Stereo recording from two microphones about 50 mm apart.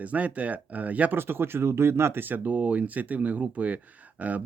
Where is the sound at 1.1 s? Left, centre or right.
Right.